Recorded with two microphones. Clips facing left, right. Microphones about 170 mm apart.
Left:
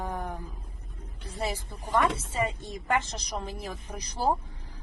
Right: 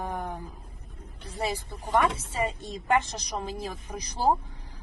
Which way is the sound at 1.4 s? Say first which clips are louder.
Right 2 dB; 10° right (ahead or behind).